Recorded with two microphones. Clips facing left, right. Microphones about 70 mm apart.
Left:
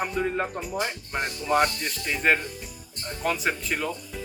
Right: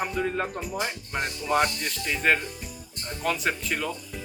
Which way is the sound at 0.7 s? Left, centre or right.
Centre.